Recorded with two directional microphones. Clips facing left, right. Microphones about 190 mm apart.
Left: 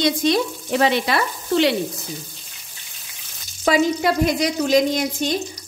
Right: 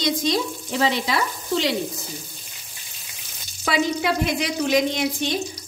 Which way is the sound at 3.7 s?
40° left (ahead or behind).